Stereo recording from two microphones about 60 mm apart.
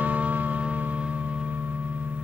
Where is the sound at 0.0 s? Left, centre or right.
Right.